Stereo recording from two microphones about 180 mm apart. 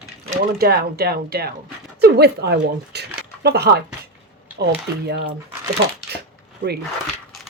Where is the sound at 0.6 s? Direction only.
60° right (ahead or behind).